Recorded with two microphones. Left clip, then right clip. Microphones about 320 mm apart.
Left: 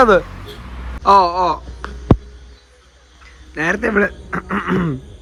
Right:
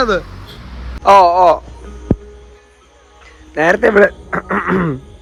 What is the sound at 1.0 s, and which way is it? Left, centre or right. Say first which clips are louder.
Speech: right 5 dB; centre.